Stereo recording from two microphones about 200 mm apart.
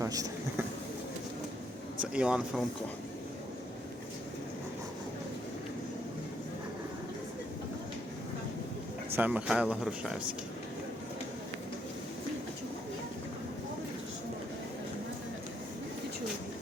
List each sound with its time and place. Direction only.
0.0 s a sound: 15° right (ahead or behind)
2.0 s speech: 5° right (ahead or behind)
9.1 s speech: 5° right (ahead or behind)